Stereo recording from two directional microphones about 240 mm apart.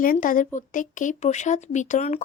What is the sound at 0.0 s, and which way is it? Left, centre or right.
Speech, left.